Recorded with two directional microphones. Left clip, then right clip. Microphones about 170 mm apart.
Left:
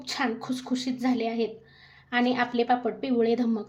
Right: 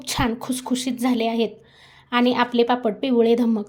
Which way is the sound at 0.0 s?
55° right (ahead or behind).